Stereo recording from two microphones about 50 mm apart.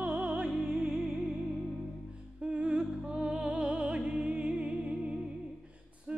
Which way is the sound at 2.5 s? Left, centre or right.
Right.